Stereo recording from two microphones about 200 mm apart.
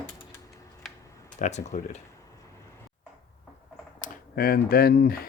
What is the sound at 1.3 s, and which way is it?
Speech, 35° left (ahead or behind).